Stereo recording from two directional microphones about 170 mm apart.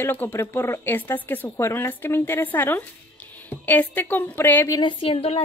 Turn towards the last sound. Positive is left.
turn(degrees=35)  # may be behind; listen again after turning